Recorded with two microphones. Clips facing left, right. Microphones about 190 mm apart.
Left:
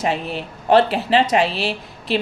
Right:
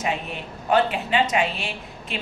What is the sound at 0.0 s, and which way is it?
A woman's voice, 35° left (ahead or behind).